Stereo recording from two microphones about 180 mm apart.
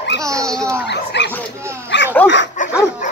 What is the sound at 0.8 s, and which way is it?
Dog, 75° left (ahead or behind).